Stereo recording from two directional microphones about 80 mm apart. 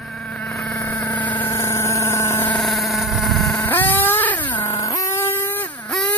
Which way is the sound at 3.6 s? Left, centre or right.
Left.